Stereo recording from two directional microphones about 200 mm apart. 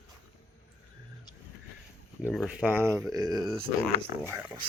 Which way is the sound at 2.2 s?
Centre (ahead or behind).